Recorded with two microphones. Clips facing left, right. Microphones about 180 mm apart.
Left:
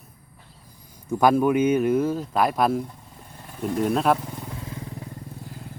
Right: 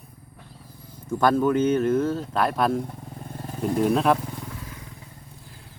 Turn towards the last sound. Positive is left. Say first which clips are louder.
# left 5 dB
turn(degrees=30)  # may be behind; listen again after turning